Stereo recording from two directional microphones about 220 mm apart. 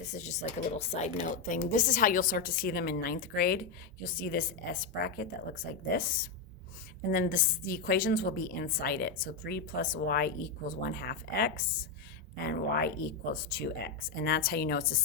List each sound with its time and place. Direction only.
0.0 s speech: 30° left (ahead or behind)